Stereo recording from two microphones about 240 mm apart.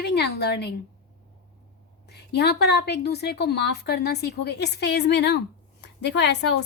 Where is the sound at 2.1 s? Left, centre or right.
Left.